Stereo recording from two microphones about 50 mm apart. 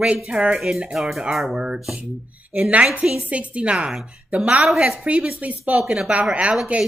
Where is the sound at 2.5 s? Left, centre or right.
Right.